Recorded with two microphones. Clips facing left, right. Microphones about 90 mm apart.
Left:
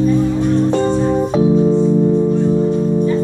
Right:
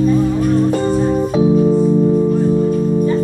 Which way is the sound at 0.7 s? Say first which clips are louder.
Left 1 dB; 25° left (ahead or behind).